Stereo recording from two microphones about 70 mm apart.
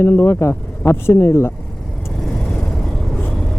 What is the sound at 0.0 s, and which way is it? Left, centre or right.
Speech, left.